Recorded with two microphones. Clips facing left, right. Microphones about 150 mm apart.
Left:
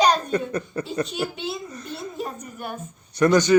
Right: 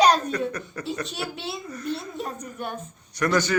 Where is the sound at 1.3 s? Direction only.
Centre (ahead or behind).